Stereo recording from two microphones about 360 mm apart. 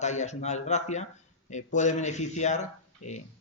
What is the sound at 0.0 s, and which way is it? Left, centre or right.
Speech, centre.